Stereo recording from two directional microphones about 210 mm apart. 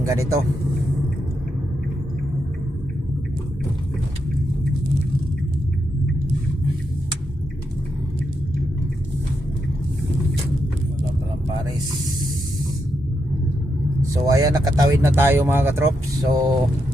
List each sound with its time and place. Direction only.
0.0 s speech: 15° right (ahead or behind)
14.1 s speech: 15° right (ahead or behind)